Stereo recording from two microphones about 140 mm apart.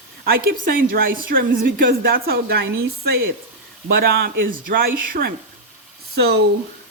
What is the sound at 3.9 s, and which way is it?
A woman's voice, 90° right.